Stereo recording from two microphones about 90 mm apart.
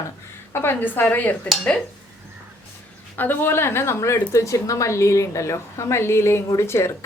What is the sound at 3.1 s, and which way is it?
A woman's voice, 20° left (ahead or behind).